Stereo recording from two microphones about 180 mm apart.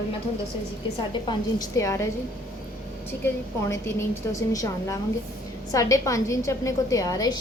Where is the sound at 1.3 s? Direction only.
20° left (ahead or behind).